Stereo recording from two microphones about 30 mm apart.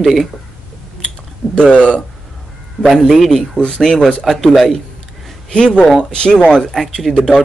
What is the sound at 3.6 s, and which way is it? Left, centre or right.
Speech, left.